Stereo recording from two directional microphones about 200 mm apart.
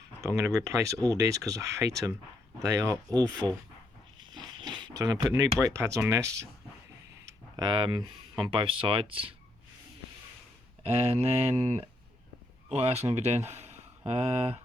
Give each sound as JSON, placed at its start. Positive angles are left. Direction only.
{"t": 0.2, "sound": "speech", "side_deg": -15}
{"t": 4.2, "sound": "a sound", "side_deg": -20}
{"t": 5.6, "sound": "speech", "side_deg": -15}
{"t": 7.3, "sound": "a sound", "side_deg": -20}
{"t": 8.4, "sound": "speech", "side_deg": -25}
{"t": 10.8, "sound": "speech", "side_deg": -30}